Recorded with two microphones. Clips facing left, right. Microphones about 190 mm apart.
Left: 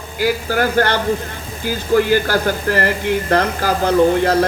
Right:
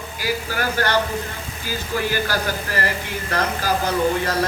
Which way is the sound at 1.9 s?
55° left (ahead or behind).